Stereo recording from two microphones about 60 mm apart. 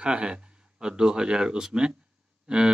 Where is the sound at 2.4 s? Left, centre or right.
Centre.